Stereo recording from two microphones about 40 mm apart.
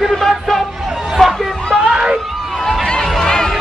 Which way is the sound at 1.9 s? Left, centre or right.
Centre.